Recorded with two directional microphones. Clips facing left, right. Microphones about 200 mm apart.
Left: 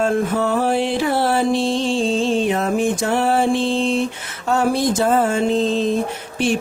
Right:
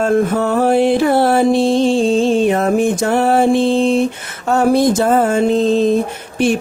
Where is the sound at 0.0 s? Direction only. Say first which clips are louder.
Right 4 dB; 50° right (ahead or behind).